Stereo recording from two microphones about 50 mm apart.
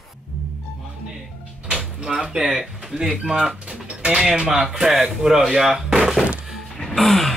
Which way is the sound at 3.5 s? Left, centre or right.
Right.